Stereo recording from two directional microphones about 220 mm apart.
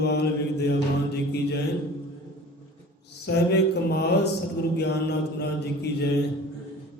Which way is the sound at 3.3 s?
50° left (ahead or behind).